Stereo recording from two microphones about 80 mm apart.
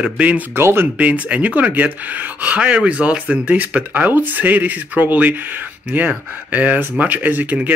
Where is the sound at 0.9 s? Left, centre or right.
Centre.